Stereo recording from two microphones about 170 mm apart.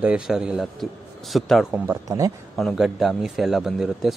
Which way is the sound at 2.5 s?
Centre (ahead or behind).